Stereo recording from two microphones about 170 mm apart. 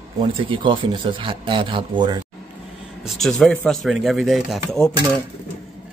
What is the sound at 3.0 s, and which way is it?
Speech, centre (ahead or behind).